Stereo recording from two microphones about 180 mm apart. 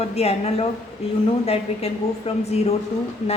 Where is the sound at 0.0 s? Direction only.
35° left (ahead or behind).